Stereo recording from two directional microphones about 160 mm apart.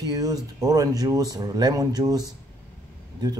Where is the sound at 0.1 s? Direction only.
20° right (ahead or behind).